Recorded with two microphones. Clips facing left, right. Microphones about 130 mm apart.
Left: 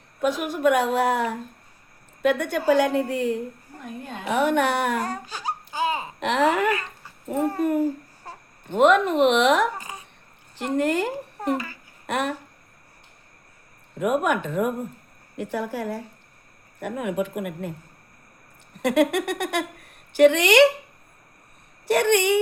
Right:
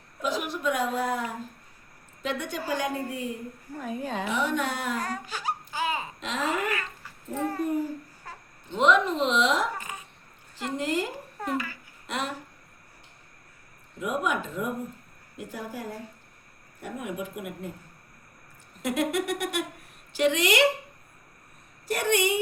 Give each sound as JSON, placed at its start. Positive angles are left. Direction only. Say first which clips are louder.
{"t": 0.2, "sound": "a woman's voice", "louder": "left 7 dB", "side_deg": 55}
{"t": 2.2, "sound": "a woman's voice", "louder": "left 10 dB", "side_deg": 60}
{"t": 4.3, "sound": "a woman's voice", "louder": "left 9 dB", "side_deg": 60}
{"t": 5.0, "sound": "a sound", "louder": "left 2 dB", "side_deg": 30}
{"t": 6.1, "sound": "a woman's voice", "louder": "left 13 dB", "side_deg": 70}
{"t": 8.6, "sound": "speech", "louder": "left 5 dB", "side_deg": 55}
{"t": 9.9, "sound": "a sound", "louder": "left 1 dB", "side_deg": 25}
{"t": 10.8, "sound": "speech", "louder": "left 6 dB", "side_deg": 65}
{"t": 14.0, "sound": "speech", "louder": "left 6 dB", "side_deg": 65}
{"t": 15.4, "sound": "a woman's voice", "louder": "left 8 dB", "side_deg": 75}
{"t": 18.8, "sound": "a woman's voice", "louder": "left 6 dB", "side_deg": 65}
{"t": 21.8, "sound": "a woman's voice", "louder": "left 6 dB", "side_deg": 70}